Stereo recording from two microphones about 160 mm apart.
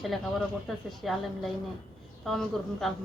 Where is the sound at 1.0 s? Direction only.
Centre (ahead or behind).